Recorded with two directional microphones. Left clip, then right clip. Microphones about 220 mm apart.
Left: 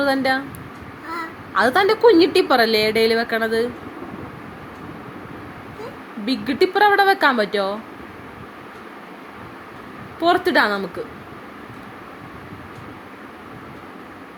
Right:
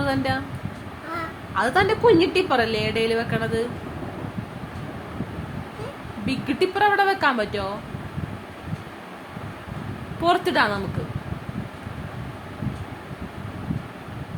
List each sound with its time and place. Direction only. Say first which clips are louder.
0.0 s speech: left 5 dB; 20° left (ahead or behind)
1.5 s a woman's voice: left 4 dB; 25° left (ahead or behind)
6.2 s a woman's voice: left 4 dB; 20° left (ahead or behind)
10.2 s a woman's voice: left 3 dB; 20° left (ahead or behind)